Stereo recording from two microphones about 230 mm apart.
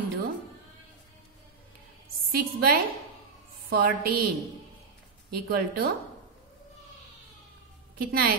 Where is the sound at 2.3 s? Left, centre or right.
Right.